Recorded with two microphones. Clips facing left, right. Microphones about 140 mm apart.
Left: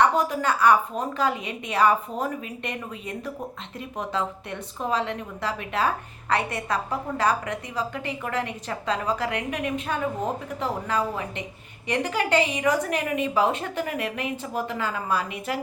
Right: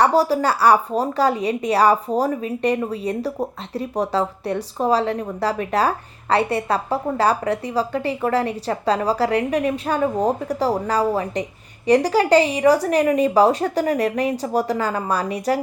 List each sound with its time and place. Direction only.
0.0 s a woman's voice: 35° right (ahead or behind)